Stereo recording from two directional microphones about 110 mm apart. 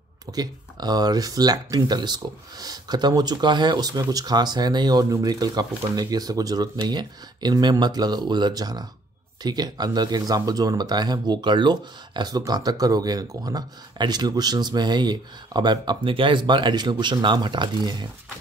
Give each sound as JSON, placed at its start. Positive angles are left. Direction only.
{"t": 0.3, "sound": "speech", "side_deg": -40}